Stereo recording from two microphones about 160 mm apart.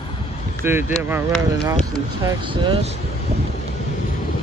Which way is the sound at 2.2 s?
30° right (ahead or behind).